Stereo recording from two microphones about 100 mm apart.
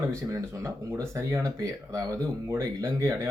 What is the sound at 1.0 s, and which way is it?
Speech, 35° right (ahead or behind).